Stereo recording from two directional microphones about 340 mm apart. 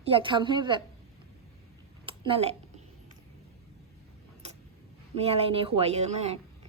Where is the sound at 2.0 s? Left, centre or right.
Centre.